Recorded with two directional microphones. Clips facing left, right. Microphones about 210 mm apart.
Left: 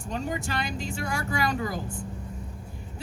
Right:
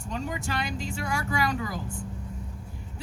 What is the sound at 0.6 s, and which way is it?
A woman's voice, 55° left (ahead or behind).